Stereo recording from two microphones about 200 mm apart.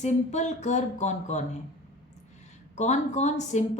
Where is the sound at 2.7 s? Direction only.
35° left (ahead or behind).